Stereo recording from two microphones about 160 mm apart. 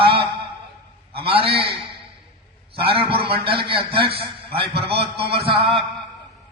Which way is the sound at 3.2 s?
35° right (ahead or behind).